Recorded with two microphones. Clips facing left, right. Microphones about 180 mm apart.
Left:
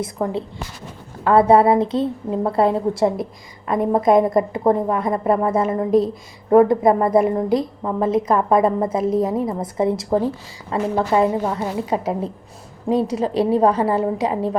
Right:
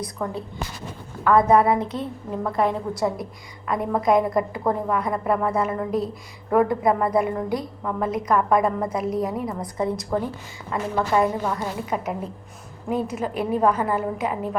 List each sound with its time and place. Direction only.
0.2 s a woman's voice: 30° left (ahead or behind)